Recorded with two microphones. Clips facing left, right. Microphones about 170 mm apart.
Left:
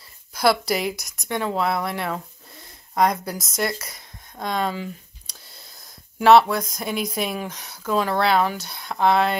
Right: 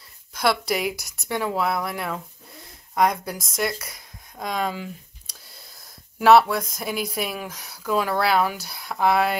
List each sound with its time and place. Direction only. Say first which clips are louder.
0.3 s a woman's voice: left 3 dB; 5° left (ahead or behind)
0.9 s a woman's voice: right 1 dB; 15° left (ahead or behind)
1.3 s speech: left 1 dB; 5° right (ahead or behind)
6.1 s speech: left 1 dB; centre (ahead or behind)